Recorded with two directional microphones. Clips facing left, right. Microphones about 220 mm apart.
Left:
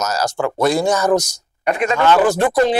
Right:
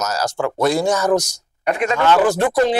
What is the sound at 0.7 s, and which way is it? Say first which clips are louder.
Speech: left 1 dB; 10° left (ahead or behind).